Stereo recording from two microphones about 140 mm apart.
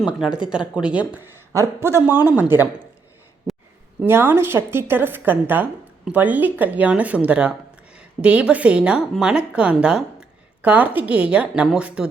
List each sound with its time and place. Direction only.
0.4 s a woman's voice: 5° right (ahead or behind)
4.0 s a woman's voice: 15° right (ahead or behind)